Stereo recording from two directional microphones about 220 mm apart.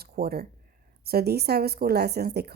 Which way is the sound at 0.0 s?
45° right (ahead or behind).